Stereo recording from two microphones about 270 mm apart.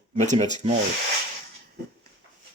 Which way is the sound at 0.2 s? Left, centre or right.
Right.